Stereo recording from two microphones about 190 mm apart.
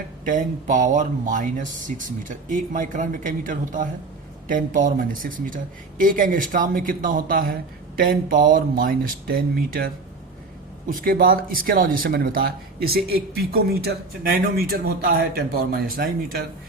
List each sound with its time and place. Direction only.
0.3 s speech: 40° right (ahead or behind)